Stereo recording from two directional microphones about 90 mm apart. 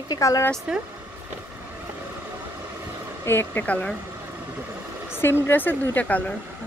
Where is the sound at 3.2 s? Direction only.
25° left (ahead or behind).